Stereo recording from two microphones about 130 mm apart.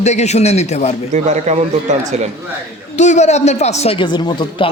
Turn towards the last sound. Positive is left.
turn(degrees=35)  # may be behind; listen again after turning